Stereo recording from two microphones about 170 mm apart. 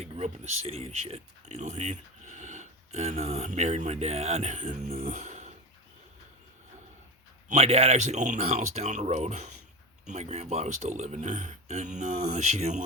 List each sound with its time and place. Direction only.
0.0 s speech: 40° right (ahead or behind)
7.4 s speech: 40° right (ahead or behind)